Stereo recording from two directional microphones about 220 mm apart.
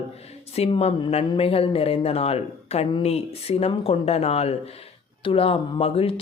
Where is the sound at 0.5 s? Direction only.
30° left (ahead or behind).